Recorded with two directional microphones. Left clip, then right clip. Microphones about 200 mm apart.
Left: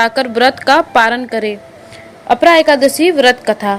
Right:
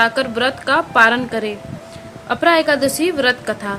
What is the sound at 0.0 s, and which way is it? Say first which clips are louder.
A woman's voice: left 5 dB; 30° left (ahead or behind).